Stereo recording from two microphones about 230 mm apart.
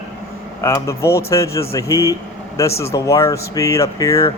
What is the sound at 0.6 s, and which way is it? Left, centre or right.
A man's voice, centre.